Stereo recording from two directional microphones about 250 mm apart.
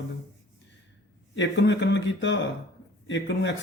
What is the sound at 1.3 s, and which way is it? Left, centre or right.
Speech, left.